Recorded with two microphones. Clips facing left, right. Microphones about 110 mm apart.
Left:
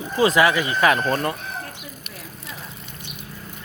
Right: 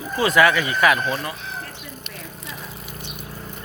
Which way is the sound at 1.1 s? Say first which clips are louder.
Left 4 dB; 50° left (ahead or behind).